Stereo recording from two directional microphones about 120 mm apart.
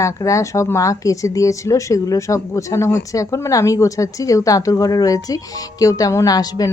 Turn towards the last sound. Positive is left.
turn(degrees=30)  # may be behind; listen again after turning